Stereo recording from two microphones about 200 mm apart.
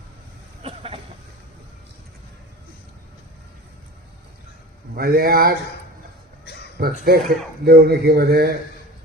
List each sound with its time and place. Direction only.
0.6 s vehicle: 30° right (ahead or behind)
4.9 s a man's voice: 50° right (ahead or behind)
7.0 s a man's voice: 50° right (ahead or behind)